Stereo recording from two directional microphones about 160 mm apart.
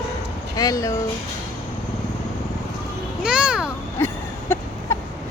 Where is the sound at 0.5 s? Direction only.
20° left (ahead or behind).